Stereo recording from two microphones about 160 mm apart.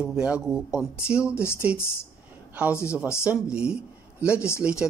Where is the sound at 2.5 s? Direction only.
10° right (ahead or behind).